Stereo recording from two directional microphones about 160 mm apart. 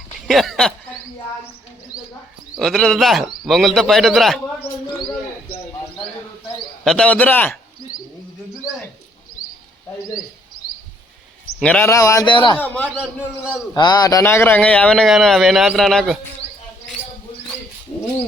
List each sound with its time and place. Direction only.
0.3 s a man's voice: centre (ahead or behind)
2.6 s a man's voice: 5° left (ahead or behind)
6.8 s a man's voice: 5° left (ahead or behind)
11.6 s speech: 10° left (ahead or behind); by 12.5 s 30° left (ahead or behind)
12.5 s a man's voice: 10° left (ahead or behind)
13.7 s a man's voice: 25° left (ahead or behind); by 16.1 s centre (ahead or behind)